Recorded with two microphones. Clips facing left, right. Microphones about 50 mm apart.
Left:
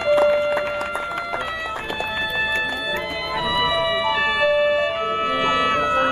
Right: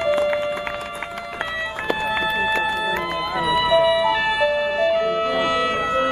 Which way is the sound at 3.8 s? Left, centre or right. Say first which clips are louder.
Right 3 dB; centre.